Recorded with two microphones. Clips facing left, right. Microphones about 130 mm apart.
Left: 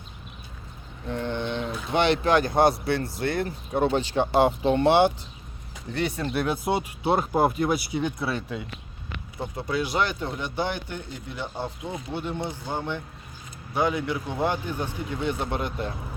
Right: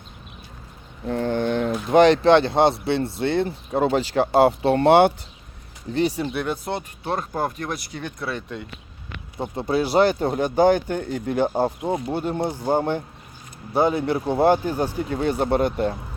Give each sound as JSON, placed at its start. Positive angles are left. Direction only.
{"t": 1.0, "sound": "speech", "side_deg": -40}
{"t": 4.6, "sound": "speech", "side_deg": -65}
{"t": 5.9, "sound": "speech", "side_deg": -30}
{"t": 6.1, "sound": "speech", "side_deg": -10}
{"t": 6.4, "sound": "speech", "side_deg": 10}
{"t": 9.4, "sound": "speech", "side_deg": -30}